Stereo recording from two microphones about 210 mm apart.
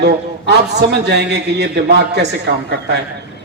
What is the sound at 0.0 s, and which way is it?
A man's voice, 50° right (ahead or behind).